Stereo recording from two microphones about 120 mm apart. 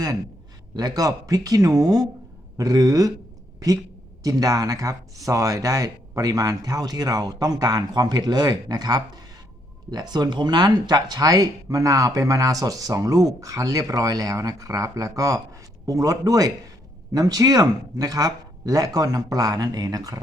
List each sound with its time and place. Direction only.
0.8 s speech: 30° right (ahead or behind)
4.2 s speech: 30° right (ahead or behind)